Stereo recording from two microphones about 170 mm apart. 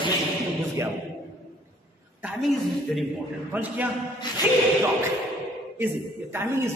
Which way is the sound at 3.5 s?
10° right (ahead or behind).